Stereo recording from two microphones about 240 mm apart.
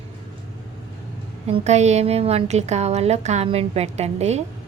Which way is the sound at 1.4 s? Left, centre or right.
Right.